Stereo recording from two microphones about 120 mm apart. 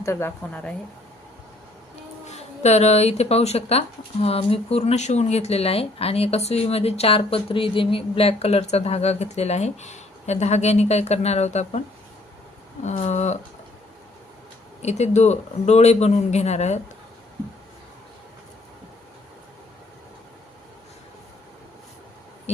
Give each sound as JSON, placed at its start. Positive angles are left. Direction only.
{"t": 0.0, "sound": "a woman's voice", "side_deg": 20}
{"t": 2.2, "sound": "speech", "side_deg": 70}
{"t": 12.8, "sound": "a man's voice", "side_deg": 70}
{"t": 14.8, "sound": "a man's voice", "side_deg": 65}